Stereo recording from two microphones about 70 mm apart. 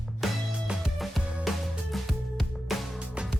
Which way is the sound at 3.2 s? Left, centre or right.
Centre.